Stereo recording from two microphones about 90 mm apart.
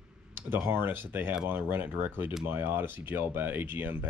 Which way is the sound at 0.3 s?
25° right (ahead or behind).